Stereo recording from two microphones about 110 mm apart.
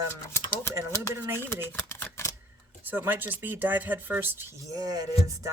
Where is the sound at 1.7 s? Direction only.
20° left (ahead or behind).